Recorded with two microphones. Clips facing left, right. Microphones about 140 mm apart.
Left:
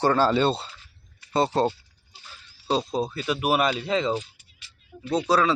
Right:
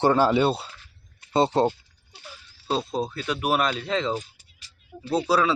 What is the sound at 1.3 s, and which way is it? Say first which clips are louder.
Speech: right 2 dB; 20° right (ahead or behind).